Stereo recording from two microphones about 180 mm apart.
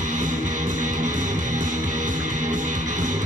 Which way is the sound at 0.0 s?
45° right (ahead or behind).